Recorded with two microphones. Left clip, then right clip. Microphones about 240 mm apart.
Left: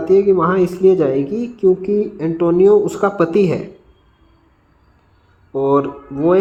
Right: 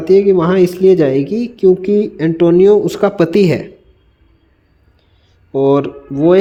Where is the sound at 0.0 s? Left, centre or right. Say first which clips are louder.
Right 3 dB; right.